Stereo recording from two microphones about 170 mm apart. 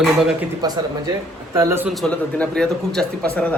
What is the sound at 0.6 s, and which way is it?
A man's voice, 20° right (ahead or behind).